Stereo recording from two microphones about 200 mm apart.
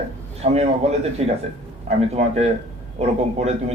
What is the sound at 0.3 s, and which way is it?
A man's voice, 30° right (ahead or behind).